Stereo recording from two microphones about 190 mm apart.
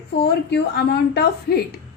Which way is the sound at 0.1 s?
60° left (ahead or behind).